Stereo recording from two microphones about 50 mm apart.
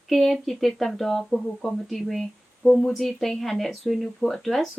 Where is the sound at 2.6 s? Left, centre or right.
Centre.